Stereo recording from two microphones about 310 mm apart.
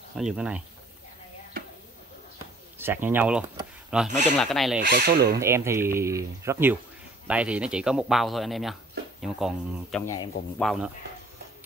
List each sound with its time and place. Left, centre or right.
0.2 s speech: centre
2.3 s a sound: centre
4.4 s speech: centre
4.8 s speech: right
5.4 s speech: centre
10.6 s speech: centre